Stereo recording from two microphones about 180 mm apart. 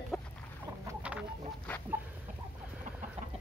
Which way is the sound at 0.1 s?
15° left (ahead or behind).